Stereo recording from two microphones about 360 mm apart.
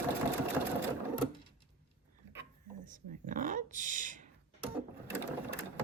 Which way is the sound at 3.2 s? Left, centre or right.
Right.